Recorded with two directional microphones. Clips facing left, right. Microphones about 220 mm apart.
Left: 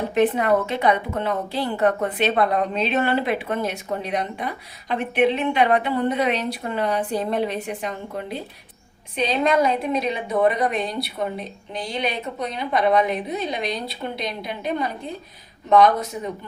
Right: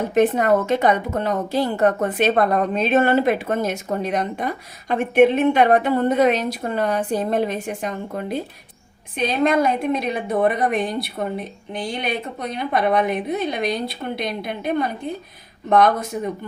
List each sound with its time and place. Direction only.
0.1 s a woman's voice: 45° right (ahead or behind)